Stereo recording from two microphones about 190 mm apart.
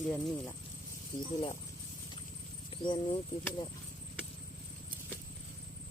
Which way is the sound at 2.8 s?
25° left (ahead or behind).